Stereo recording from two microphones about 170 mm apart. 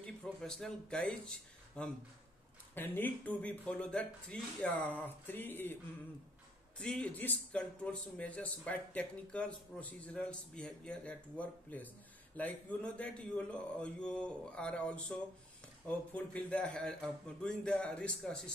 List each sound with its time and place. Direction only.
0.0 s a man's voice: 5° left (ahead or behind)
6.8 s a man's voice: 5° left (ahead or behind)